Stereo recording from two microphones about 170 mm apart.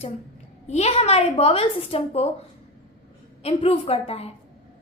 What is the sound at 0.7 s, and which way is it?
A woman's voice, 40° left (ahead or behind).